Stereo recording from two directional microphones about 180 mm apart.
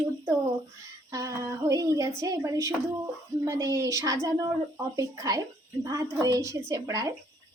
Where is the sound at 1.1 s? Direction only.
15° right (ahead or behind).